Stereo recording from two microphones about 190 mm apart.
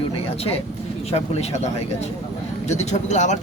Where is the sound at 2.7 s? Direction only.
40° left (ahead or behind).